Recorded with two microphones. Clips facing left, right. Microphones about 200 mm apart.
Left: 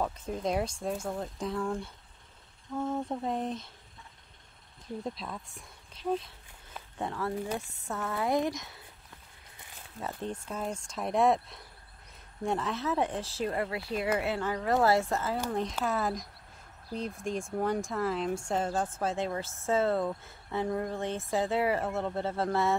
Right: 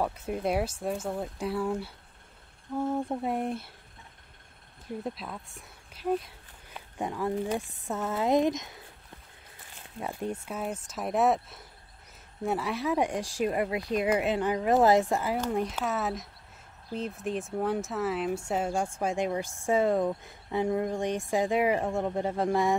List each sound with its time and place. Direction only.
0.0 s speech: 10° right (ahead or behind)
5.0 s speech: 5° right (ahead or behind); by 8.7 s 20° right (ahead or behind)
9.9 s speech: 10° right (ahead or behind)